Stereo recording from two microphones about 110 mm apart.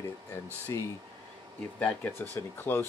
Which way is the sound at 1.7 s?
15° left (ahead or behind).